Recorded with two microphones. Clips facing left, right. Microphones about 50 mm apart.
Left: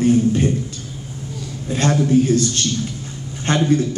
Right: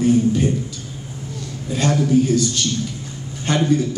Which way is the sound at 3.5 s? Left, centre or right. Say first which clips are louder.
Left 1 dB; left.